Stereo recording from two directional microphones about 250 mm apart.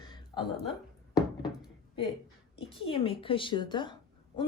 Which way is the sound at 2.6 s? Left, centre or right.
Left.